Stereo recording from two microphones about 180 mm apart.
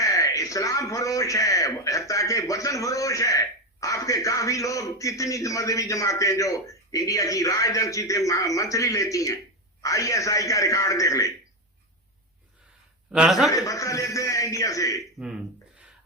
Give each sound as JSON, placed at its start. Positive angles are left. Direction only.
{"t": 0.0, "sound": "a man's voice", "side_deg": 20}
{"t": 13.1, "sound": "a man's voice", "side_deg": -5}
{"t": 13.5, "sound": "a man's voice", "side_deg": 20}